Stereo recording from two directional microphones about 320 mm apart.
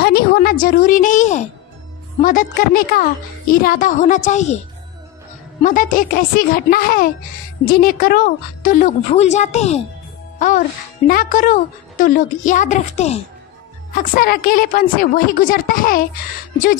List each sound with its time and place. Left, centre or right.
0.0 s a woman's voice: left
5.6 s speech: left
11.1 s speech: left